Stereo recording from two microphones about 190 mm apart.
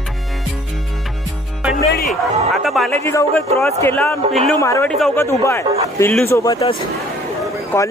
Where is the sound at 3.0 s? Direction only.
15° left (ahead or behind).